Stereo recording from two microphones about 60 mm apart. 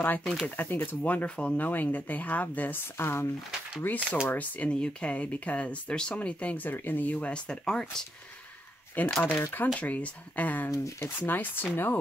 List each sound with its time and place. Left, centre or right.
0.2 s speech: centre
0.6 s speech: left
1.7 s speech: left
3.0 s speech: left; by 7.8 s centre
9.0 s speech: left
9.8 s speech: left
10.7 s speech: left
11.1 s speech: left